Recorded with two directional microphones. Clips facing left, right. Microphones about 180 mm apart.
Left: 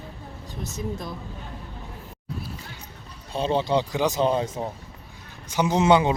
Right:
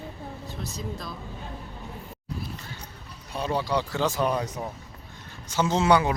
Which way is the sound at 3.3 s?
25° left (ahead or behind).